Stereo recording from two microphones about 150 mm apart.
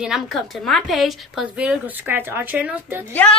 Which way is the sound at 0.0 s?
Centre (ahead or behind).